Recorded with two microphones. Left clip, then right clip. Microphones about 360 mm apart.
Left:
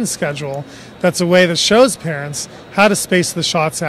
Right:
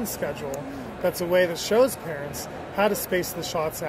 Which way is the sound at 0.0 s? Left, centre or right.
Left.